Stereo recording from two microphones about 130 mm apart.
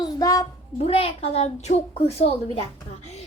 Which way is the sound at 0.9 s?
50° left (ahead or behind).